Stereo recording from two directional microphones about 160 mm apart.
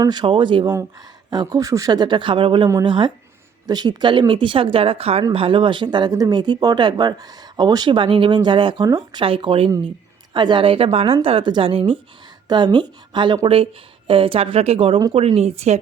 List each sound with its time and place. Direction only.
0.0 s a woman's voice: 25° right (ahead or behind); by 15.8 s 40° right (ahead or behind)